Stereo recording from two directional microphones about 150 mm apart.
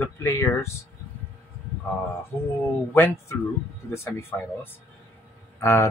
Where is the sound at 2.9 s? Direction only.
15° left (ahead or behind).